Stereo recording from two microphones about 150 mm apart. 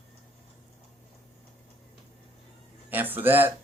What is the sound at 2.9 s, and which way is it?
Speech, 10° right (ahead or behind).